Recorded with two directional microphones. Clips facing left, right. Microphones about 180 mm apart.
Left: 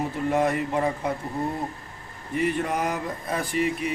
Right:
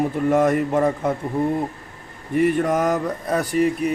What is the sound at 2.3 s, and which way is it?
Speech, 45° right (ahead or behind).